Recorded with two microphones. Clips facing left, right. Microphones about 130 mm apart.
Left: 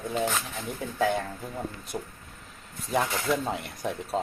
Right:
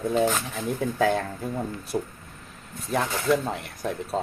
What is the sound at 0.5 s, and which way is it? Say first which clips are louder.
Speech: right 5 dB; centre (ahead or behind).